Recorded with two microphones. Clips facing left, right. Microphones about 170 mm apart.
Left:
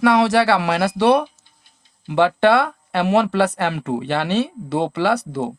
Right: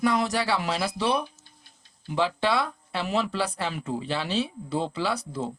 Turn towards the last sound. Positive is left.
turn(degrees=70)  # may be behind; listen again after turning